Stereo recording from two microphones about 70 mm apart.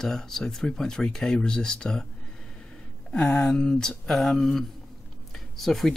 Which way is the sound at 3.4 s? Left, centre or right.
Centre.